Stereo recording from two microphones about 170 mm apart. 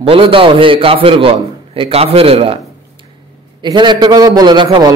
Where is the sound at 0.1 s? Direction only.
30° right (ahead or behind).